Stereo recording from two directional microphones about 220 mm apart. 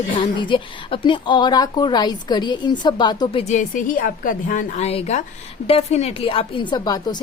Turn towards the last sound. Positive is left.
turn(degrees=20)  # may be behind; listen again after turning